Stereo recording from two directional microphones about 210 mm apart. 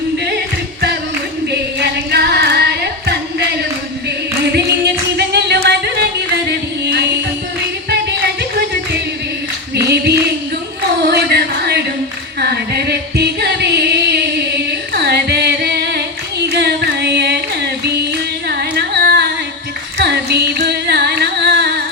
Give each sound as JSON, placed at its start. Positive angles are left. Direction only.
{"t": 1.5, "sound": "carnatic music", "side_deg": -50}
{"t": 5.1, "sound": "music", "side_deg": -50}
{"t": 9.7, "sound": "singing", "side_deg": -50}
{"t": 11.0, "sound": "music", "side_deg": -50}
{"t": 20.0, "sound": "carnatic music", "side_deg": -55}